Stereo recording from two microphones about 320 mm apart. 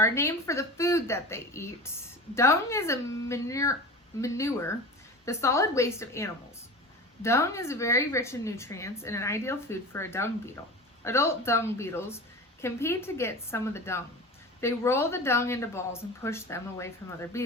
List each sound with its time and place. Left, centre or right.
0.0 s a woman's voice: centre